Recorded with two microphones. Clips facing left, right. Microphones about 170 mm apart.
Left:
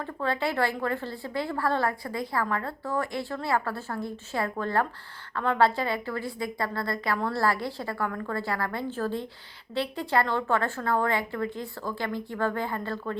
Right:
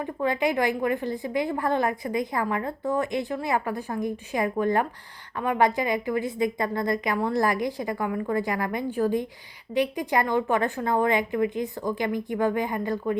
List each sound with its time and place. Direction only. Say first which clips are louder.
0.0 s a woman's voice: right 4 dB; 15° right (ahead or behind)